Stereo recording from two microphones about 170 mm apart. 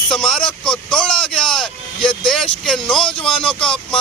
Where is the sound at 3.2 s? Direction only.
5° left (ahead or behind).